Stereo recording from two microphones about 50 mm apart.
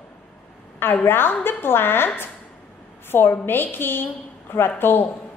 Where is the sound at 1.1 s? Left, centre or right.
Left.